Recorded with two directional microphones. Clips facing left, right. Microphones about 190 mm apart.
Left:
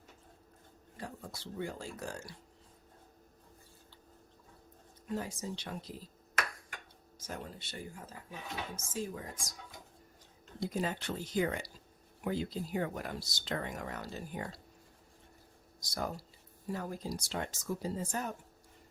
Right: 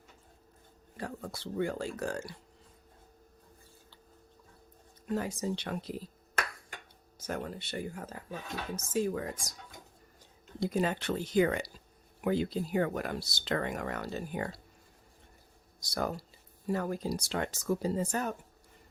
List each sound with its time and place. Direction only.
0.9 s speech: 65° right (ahead or behind)
5.1 s speech: 70° right (ahead or behind)
7.3 s speech: 65° right (ahead or behind)
10.6 s speech: 70° right (ahead or behind)
15.8 s speech: 65° right (ahead or behind)